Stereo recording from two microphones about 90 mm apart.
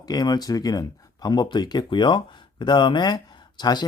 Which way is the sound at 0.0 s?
45° left (ahead or behind).